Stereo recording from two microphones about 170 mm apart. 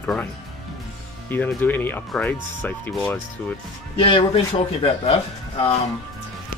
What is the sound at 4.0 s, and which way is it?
Speech, 30° left (ahead or behind).